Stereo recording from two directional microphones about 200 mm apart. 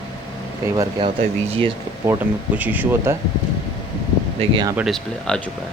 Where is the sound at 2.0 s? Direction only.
10° right (ahead or behind).